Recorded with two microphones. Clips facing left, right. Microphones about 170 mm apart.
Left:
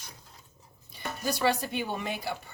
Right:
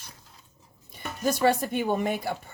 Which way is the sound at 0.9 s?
45° right (ahead or behind).